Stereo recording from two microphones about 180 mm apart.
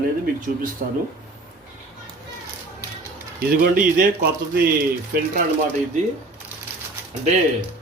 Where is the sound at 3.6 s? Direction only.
50° right (ahead or behind).